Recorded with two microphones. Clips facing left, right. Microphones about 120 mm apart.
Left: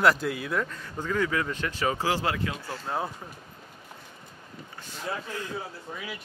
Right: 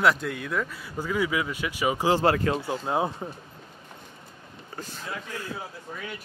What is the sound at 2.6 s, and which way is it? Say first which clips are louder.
Speech: right 5 dB; 20° right (ahead or behind).